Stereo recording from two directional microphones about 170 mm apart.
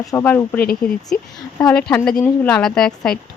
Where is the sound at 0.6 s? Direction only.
65° left (ahead or behind).